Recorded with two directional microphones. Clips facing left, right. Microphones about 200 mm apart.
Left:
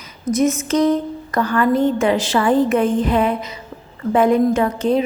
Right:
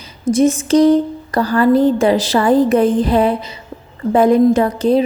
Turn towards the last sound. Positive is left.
turn(degrees=-35)  # may be behind; listen again after turning